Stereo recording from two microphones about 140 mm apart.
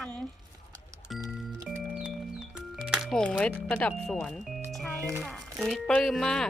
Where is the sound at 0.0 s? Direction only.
10° left (ahead or behind).